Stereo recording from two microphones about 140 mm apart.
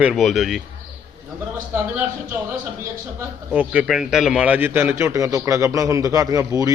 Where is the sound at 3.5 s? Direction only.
10° right (ahead or behind).